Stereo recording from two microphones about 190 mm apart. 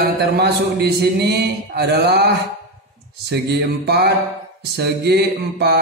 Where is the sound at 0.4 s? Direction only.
60° right (ahead or behind).